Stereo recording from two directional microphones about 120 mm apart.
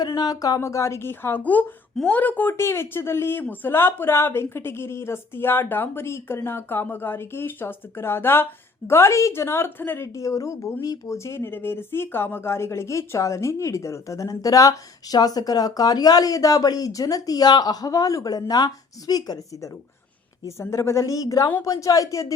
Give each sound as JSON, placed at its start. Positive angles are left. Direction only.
{"t": 0.0, "sound": "a woman's voice", "side_deg": 35}
{"t": 20.4, "sound": "a woman's voice", "side_deg": 25}